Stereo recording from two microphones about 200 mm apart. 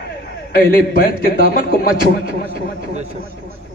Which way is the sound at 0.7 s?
45° left (ahead or behind).